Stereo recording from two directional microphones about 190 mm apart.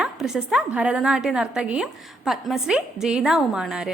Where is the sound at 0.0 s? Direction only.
5° right (ahead or behind).